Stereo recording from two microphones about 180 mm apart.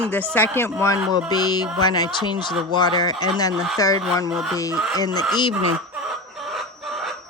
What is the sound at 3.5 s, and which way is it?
Speech, centre (ahead or behind).